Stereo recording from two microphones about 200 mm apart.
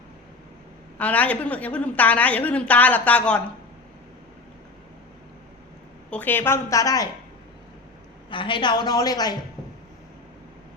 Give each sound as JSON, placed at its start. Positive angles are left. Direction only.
{"t": 0.9, "sound": "a woman's voice", "side_deg": 5}
{"t": 6.1, "sound": "a woman's voice", "side_deg": 10}
{"t": 8.3, "sound": "a woman's voice", "side_deg": 25}